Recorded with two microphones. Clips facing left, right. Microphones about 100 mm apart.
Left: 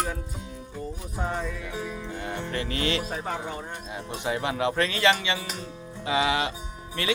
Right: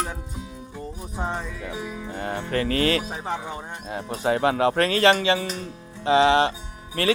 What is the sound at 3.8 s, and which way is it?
Speech, 40° right (ahead or behind).